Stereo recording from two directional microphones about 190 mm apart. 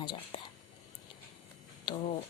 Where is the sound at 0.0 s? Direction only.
25° left (ahead or behind).